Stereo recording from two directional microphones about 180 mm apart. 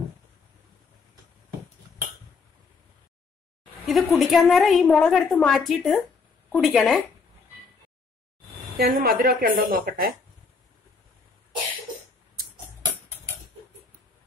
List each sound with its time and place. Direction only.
3.8 s a woman's voice: centre (ahead or behind)
8.7 s a woman's voice: 55° right (ahead or behind)